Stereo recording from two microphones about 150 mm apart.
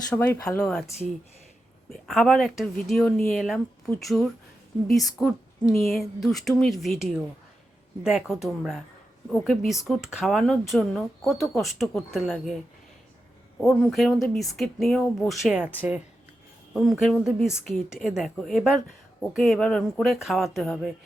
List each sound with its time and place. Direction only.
0.1 s speech: 15° left (ahead or behind)
0.6 s speech: 5° left (ahead or behind)
1.9 s speech: centre (ahead or behind)
13.6 s speech: 5° left (ahead or behind)